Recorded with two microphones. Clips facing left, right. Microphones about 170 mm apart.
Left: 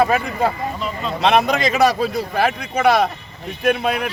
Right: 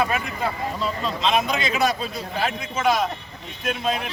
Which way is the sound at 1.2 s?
70° left (ahead or behind).